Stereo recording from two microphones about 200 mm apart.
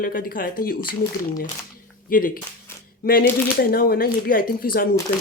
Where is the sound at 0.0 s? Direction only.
45° left (ahead or behind).